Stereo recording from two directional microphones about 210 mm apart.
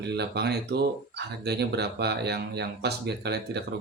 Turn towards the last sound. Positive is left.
turn(degrees=-50)  # may be behind; listen again after turning